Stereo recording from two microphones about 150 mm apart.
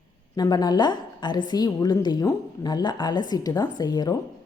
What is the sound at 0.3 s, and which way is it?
A woman's voice, 25° left (ahead or behind).